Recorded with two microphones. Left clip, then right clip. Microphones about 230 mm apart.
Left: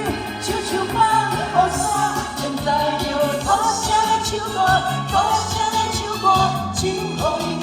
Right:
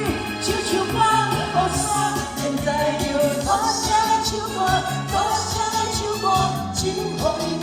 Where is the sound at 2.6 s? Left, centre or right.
Centre.